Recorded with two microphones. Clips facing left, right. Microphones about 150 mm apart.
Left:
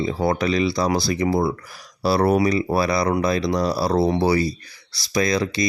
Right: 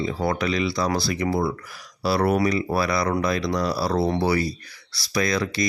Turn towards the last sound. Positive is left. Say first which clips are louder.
# left 3 dB
turn(degrees=25)  # may be behind; listen again after turning